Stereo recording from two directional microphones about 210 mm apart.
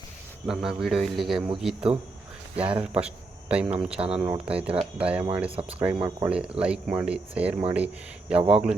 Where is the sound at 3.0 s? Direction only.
5° right (ahead or behind).